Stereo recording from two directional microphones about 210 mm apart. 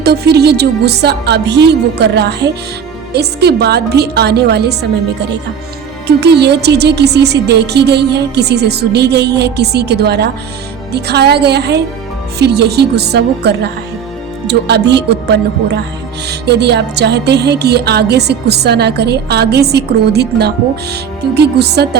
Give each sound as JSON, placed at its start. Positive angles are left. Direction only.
{"t": 0.0, "sound": "music", "side_deg": -50}